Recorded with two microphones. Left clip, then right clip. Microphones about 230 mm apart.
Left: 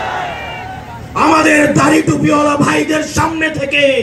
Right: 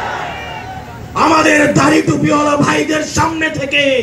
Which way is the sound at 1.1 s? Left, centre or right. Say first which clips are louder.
Even; left.